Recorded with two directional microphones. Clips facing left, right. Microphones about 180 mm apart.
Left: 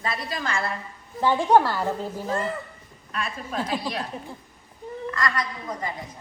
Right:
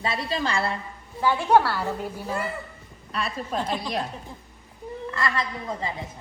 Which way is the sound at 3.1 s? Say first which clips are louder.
Right 2 dB; 35° right (ahead or behind).